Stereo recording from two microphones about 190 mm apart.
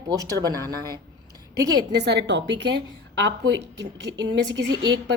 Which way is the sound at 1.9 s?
60° right (ahead or behind).